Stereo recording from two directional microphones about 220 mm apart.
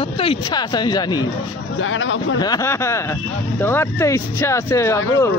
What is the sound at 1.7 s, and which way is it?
Speech, 60° left (ahead or behind).